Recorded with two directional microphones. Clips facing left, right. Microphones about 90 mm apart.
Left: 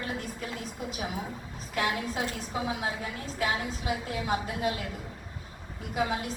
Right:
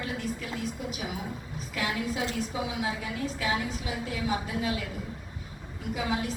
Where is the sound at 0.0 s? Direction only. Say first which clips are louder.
Right 1 dB; 35° left (ahead or behind).